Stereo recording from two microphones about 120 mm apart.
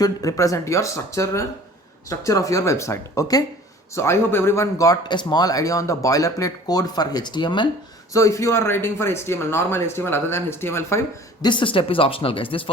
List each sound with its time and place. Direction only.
0.0 s speech: 30° left (ahead or behind)
8.1 s speech: 25° left (ahead or behind)
11.4 s speech: 45° left (ahead or behind)